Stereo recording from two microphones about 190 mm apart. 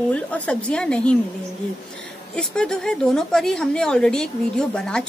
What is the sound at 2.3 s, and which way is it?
A woman's voice, 5° left (ahead or behind).